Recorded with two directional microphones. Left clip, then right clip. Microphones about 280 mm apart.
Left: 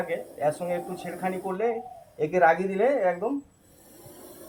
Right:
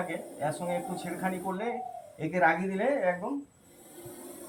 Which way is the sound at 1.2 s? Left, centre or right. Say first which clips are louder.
Left 6 dB; centre.